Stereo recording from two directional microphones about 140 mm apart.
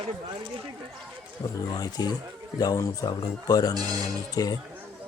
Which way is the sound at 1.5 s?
30° left (ahead or behind).